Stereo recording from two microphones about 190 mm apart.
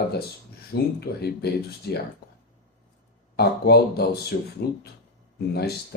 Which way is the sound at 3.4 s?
55° left (ahead or behind).